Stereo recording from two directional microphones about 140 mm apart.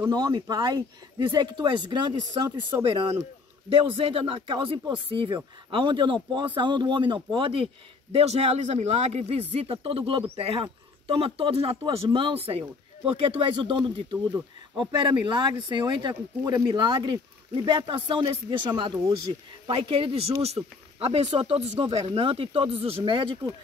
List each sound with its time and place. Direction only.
0.1 s speech: 30° right (ahead or behind)